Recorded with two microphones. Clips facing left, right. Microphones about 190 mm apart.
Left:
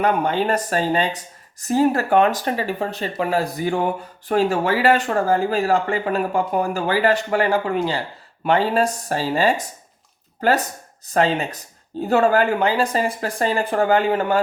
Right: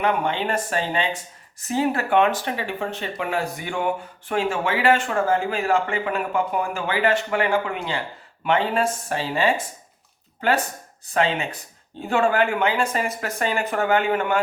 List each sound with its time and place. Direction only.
0.0 s speech: 40° left (ahead or behind)
11.1 s speech: 40° left (ahead or behind)